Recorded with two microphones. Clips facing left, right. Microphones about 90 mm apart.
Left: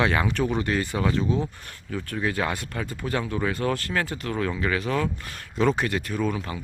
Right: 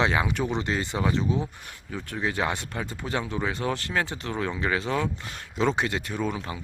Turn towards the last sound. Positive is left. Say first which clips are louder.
# left 2 dB
turn(degrees=-20)  # may be behind; listen again after turning